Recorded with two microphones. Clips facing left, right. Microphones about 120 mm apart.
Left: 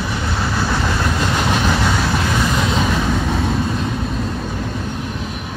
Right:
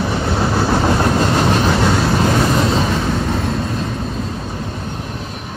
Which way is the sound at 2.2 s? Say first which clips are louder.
Right 4 dB; 35° right (ahead or behind).